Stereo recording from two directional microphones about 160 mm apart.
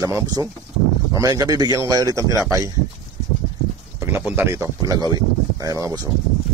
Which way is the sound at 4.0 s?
15° right (ahead or behind).